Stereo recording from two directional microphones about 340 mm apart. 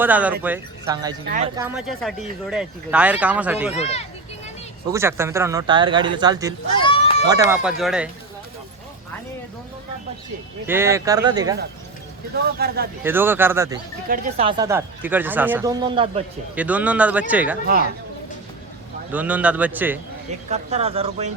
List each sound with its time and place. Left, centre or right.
0.0 s speech: centre
3.8 s speech: centre
4.9 s speech: centre
6.7 s a sound: centre
7.5 s speech: centre
10.7 s speech: centre
12.5 s speech: right
13.0 s speech: centre
19.1 s speech: centre
20.5 s speech: centre